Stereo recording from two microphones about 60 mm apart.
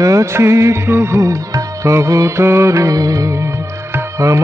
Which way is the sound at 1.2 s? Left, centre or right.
Right.